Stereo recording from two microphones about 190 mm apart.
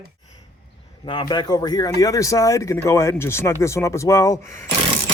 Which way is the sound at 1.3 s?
20° left (ahead or behind).